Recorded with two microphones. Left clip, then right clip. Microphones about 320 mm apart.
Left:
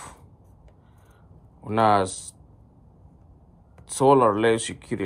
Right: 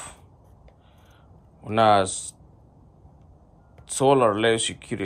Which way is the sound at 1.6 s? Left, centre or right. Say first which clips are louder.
Right 2 dB; centre.